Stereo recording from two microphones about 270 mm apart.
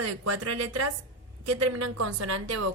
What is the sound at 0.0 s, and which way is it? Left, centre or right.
A woman's voice, right.